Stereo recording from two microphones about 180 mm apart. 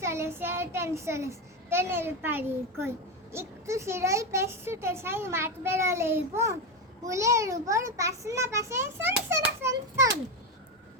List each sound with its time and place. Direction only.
0.0 s speech: 15° right (ahead or behind)